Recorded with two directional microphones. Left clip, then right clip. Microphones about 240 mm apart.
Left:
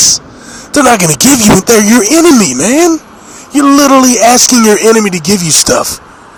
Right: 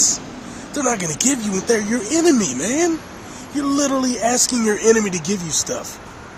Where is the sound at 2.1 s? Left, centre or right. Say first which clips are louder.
Left 7 dB; left.